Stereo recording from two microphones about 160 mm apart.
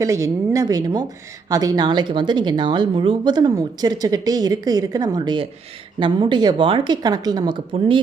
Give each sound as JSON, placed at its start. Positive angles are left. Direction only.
{"t": 0.0, "sound": "speech", "side_deg": -20}